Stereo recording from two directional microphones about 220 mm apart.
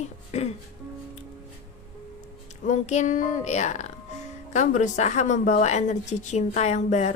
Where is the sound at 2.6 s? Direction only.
35° left (ahead or behind).